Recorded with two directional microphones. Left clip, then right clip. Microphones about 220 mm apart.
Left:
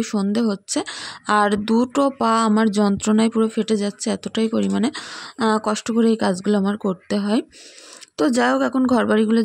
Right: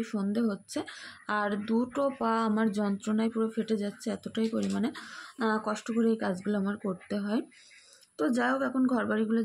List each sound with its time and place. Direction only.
0.0 s speech: 45° left (ahead or behind)